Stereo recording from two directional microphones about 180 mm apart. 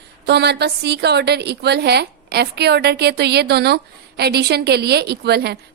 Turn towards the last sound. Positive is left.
turn(degrees=-65)  # may be behind; listen again after turning